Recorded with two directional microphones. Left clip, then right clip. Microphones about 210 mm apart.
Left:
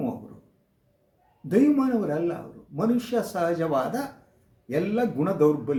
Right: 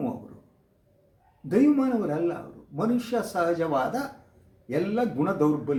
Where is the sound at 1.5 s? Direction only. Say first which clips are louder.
Left 1 dB; 10° left (ahead or behind).